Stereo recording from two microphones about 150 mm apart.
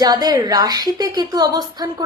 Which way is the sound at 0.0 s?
25° right (ahead or behind).